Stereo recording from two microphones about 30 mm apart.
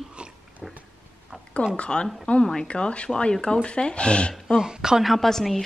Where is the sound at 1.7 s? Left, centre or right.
Left.